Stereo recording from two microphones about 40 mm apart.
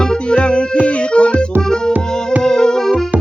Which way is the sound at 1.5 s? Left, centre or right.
Right.